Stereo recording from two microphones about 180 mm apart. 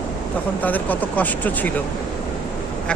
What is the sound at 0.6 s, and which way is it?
Speech, 10° left (ahead or behind).